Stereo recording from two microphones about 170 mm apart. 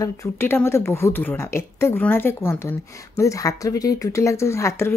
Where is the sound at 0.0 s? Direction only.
15° left (ahead or behind).